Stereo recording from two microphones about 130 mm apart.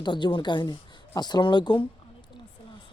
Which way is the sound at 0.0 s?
35° left (ahead or behind).